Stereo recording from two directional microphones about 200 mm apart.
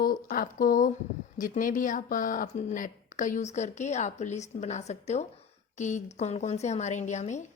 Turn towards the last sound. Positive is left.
turn(degrees=35)  # may be behind; listen again after turning